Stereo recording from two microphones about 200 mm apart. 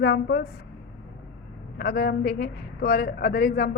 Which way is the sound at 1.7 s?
55° left (ahead or behind).